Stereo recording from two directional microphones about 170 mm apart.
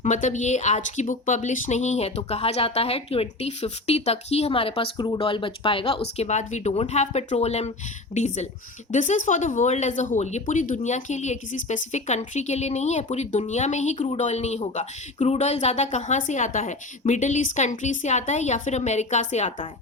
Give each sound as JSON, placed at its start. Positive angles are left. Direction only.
{"t": 0.0, "sound": "speech", "side_deg": 45}